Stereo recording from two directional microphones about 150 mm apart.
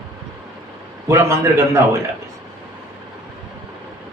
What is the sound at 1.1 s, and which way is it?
Speech, 15° right (ahead or behind).